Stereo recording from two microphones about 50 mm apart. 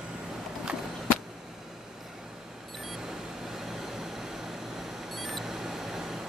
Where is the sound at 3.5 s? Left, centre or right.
Centre.